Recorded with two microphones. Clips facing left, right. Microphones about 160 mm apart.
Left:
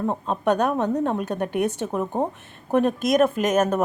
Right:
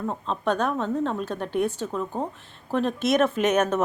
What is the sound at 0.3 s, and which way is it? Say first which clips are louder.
A woman's voice: left 3 dB; 15° left (ahead or behind).